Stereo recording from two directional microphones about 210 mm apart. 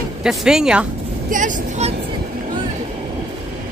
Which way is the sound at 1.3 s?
35° right (ahead or behind).